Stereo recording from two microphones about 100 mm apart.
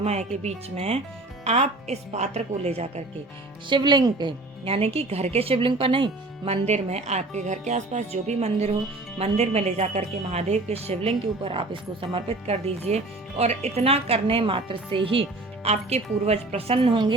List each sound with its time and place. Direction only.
0.0 s a woman's voice: 90° right
3.7 s speech: 50° right (ahead or behind)
4.6 s a woman's voice: 75° right (ahead or behind)